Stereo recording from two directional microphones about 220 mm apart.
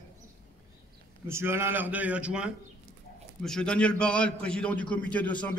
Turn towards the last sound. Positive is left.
turn(degrees=5)  # may be behind; listen again after turning